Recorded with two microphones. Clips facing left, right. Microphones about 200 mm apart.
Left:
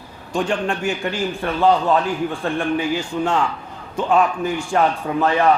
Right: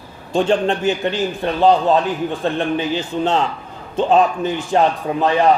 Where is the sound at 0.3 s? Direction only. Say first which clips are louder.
Right 5 dB; 25° right (ahead or behind).